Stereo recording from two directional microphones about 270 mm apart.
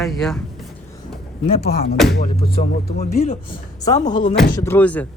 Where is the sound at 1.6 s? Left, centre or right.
Left.